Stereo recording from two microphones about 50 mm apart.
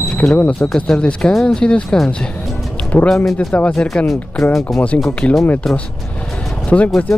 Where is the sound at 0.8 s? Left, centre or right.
Left.